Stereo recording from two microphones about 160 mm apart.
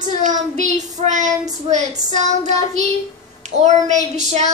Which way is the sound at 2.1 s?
45° right (ahead or behind).